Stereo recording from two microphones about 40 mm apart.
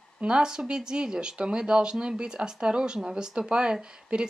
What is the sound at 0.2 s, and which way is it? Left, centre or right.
Speech, centre.